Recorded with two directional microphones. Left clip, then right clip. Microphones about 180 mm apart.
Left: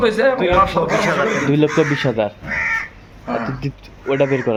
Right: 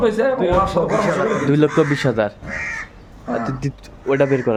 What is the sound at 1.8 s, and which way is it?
Speech, centre (ahead or behind).